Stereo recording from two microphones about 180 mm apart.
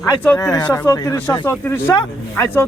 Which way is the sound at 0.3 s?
20° left (ahead or behind).